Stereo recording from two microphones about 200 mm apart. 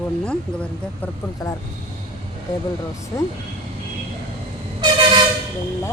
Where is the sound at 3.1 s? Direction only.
15° left (ahead or behind).